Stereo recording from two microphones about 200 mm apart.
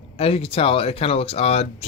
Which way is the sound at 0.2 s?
30° left (ahead or behind).